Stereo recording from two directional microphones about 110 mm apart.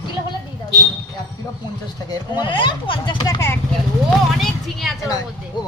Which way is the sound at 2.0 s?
40° left (ahead or behind).